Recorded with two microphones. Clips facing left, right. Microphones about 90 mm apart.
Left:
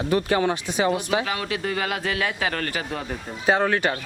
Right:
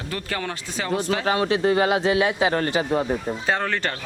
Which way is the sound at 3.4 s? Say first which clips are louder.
Left 9 dB; 15° left (ahead or behind).